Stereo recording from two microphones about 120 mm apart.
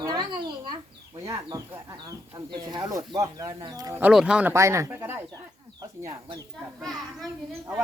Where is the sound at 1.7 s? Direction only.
25° right (ahead or behind).